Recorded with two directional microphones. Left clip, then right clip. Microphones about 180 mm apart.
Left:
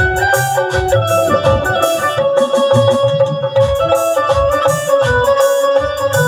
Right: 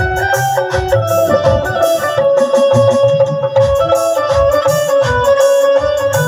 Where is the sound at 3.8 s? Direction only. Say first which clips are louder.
Even; 10° left (ahead or behind).